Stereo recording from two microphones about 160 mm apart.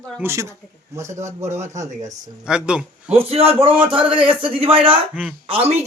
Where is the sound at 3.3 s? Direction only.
35° right (ahead or behind).